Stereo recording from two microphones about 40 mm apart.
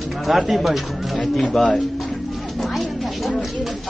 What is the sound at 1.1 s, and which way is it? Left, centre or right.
Speech, centre.